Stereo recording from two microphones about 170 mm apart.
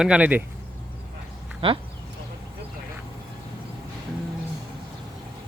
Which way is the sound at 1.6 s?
30° right (ahead or behind).